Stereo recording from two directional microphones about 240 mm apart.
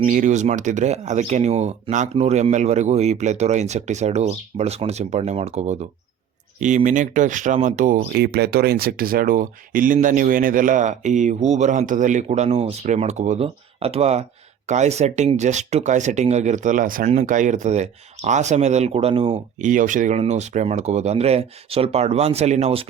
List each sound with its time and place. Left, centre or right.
0.1 s speech: right